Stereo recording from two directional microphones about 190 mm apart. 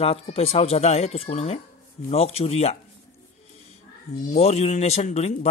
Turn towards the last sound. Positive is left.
turn(degrees=35)  # may be behind; listen again after turning